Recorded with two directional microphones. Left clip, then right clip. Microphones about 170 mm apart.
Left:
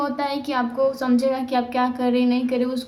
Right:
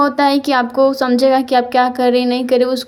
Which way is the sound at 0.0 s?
45° right (ahead or behind).